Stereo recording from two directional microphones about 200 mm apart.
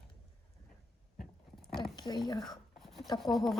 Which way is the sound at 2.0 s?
20° left (ahead or behind).